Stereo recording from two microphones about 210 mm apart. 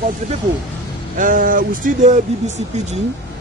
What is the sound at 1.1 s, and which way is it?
A man's voice, 40° right (ahead or behind).